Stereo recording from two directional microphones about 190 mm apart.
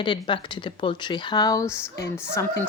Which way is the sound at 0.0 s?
25° left (ahead or behind).